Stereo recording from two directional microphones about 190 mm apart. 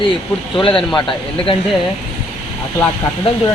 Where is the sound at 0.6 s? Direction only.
25° left (ahead or behind).